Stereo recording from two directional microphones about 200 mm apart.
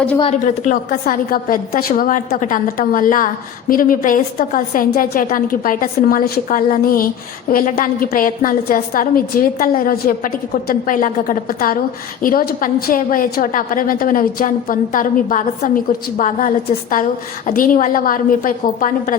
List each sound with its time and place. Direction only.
0.2 s a woman's voice: 35° left (ahead or behind)